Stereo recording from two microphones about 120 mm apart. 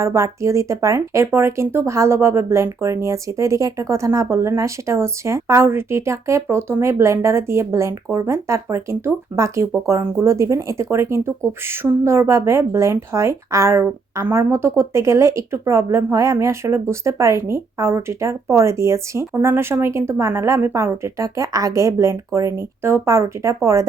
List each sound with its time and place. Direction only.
0.0 s speech: 25° right (ahead or behind)